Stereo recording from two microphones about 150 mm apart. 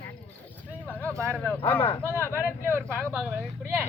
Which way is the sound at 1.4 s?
10° left (ahead or behind).